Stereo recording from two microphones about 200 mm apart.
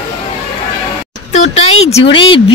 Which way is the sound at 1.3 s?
35° left (ahead or behind).